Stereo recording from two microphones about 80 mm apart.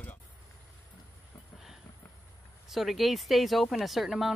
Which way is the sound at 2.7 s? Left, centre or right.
Centre.